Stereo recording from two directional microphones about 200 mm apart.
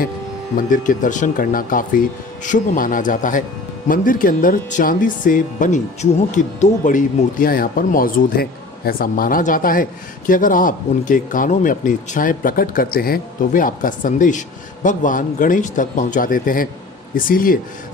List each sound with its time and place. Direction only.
0.6 s speech: 40° left (ahead or behind)